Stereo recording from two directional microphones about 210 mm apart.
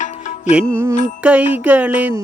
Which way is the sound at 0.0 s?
35° left (ahead or behind).